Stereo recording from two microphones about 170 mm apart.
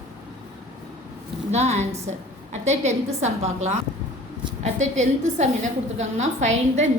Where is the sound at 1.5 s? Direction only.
40° right (ahead or behind).